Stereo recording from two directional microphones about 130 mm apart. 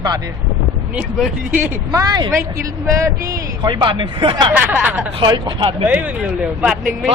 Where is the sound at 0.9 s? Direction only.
5° right (ahead or behind).